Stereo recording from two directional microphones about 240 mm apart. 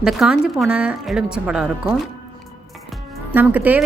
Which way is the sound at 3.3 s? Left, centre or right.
Centre.